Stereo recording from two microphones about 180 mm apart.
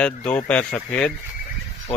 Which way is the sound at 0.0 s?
5° left (ahead or behind).